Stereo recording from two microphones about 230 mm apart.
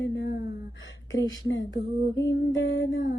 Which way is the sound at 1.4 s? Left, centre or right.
Left.